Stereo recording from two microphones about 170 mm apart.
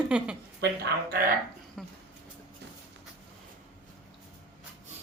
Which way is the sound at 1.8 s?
Centre (ahead or behind).